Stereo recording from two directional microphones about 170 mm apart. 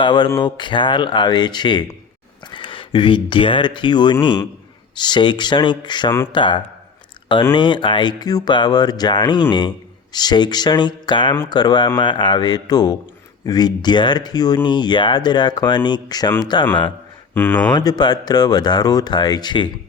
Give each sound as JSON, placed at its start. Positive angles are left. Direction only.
{"t": 0.0, "sound": "speech", "side_deg": 25}
{"t": 17.3, "sound": "speech", "side_deg": 10}
{"t": 17.7, "sound": "speech", "side_deg": 25}